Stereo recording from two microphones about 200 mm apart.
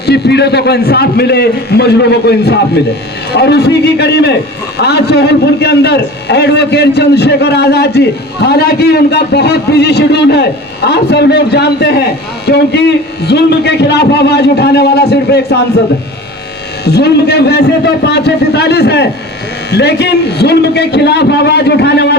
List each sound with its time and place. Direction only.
0.0 s a man's voice: 55° left (ahead or behind)
16.8 s a man's voice: 55° left (ahead or behind)